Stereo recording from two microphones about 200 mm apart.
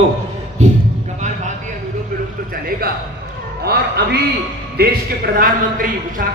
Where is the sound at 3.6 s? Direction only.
55° right (ahead or behind).